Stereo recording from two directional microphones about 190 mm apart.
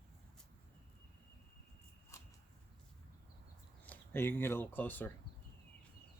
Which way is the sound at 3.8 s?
10° left (ahead or behind).